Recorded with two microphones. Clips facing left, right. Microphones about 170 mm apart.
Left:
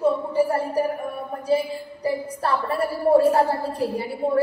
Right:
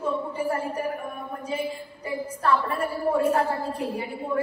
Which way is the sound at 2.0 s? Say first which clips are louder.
Left 2 dB; 35° left (ahead or behind).